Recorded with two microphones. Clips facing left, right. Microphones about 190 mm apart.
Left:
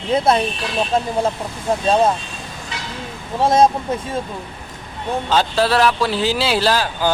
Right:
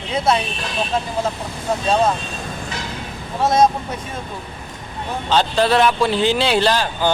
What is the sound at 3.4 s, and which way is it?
Speech, 30° left (ahead or behind).